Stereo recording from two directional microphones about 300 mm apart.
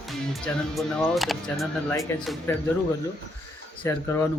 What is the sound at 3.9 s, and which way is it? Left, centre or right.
Speech, centre.